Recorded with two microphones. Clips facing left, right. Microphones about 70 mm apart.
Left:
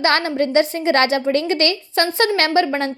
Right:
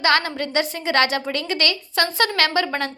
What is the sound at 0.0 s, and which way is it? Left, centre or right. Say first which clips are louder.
A woman's voice: left 2 dB; left.